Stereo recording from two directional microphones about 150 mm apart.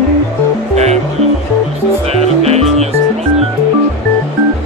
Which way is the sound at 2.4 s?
45° right (ahead or behind).